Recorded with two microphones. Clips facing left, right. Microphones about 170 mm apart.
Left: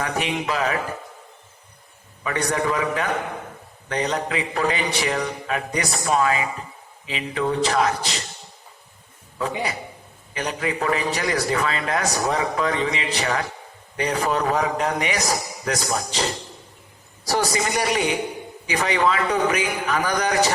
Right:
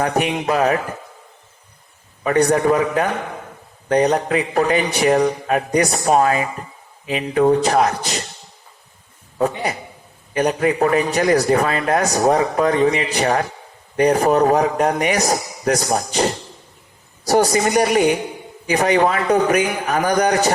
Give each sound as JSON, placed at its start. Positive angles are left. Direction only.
{"t": 0.0, "sound": "a man's voice", "side_deg": -50}
{"t": 2.2, "sound": "a man's voice", "side_deg": -40}
{"t": 10.3, "sound": "a man's voice", "side_deg": -45}